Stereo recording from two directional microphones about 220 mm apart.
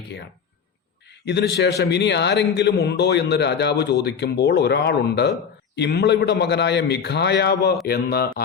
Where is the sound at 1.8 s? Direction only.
50° left (ahead or behind).